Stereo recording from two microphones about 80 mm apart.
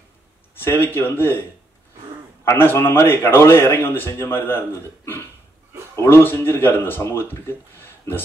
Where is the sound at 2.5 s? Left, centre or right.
Left.